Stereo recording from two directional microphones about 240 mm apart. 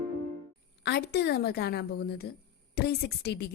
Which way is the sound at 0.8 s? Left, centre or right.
Left.